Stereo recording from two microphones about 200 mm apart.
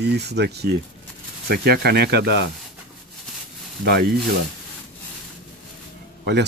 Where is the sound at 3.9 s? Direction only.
55° right (ahead or behind).